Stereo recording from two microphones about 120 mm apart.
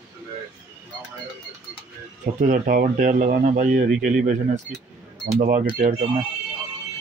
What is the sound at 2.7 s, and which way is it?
Speech, 90° right.